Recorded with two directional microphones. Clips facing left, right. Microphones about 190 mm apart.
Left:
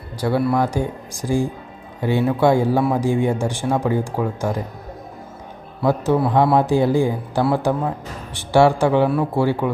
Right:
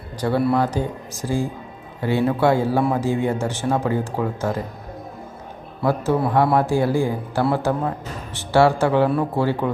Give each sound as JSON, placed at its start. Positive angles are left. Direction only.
{"t": 0.2, "sound": "a man's voice", "side_deg": 10}
{"t": 5.8, "sound": "speech", "side_deg": 15}